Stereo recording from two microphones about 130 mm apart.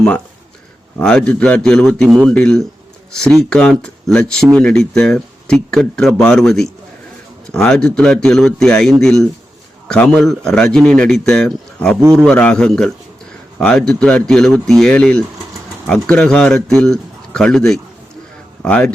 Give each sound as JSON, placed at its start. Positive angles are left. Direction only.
{"t": 0.9, "sound": "a man's voice", "side_deg": 5}